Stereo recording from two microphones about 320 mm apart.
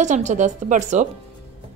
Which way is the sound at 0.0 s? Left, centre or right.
Right.